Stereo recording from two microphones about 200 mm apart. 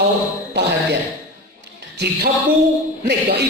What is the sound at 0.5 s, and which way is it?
Music, 60° right (ahead or behind).